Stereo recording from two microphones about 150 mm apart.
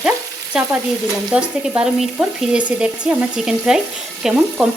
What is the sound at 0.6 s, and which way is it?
Frying, 5° right (ahead or behind).